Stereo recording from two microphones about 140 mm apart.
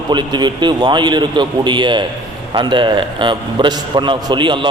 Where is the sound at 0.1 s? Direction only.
30° right (ahead or behind).